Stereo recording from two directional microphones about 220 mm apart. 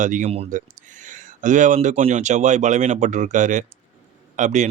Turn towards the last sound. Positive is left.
turn(degrees=-35)  # may be behind; listen again after turning